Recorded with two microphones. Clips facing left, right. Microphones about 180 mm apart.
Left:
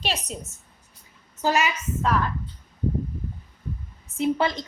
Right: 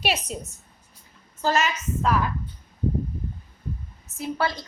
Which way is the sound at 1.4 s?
15° left (ahead or behind).